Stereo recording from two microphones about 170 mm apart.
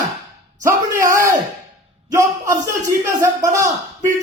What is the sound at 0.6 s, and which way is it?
Speech, 20° right (ahead or behind).